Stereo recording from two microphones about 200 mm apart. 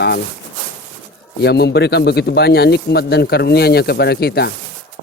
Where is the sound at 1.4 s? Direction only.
55° left (ahead or behind).